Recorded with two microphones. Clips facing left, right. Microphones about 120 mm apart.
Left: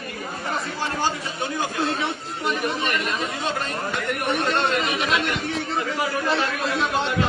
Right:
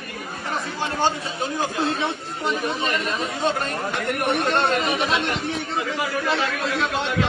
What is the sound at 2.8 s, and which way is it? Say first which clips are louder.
Speech: right 1 dB; 25° right (ahead or behind).